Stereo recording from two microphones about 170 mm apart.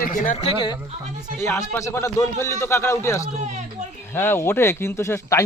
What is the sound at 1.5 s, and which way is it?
A man's voice, 15° left (ahead or behind).